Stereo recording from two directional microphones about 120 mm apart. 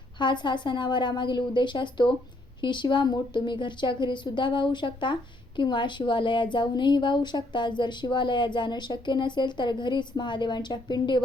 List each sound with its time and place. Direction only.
0.2 s a woman's voice: 40° left (ahead or behind)